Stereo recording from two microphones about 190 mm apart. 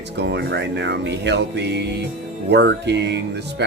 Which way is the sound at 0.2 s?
65° right (ahead or behind).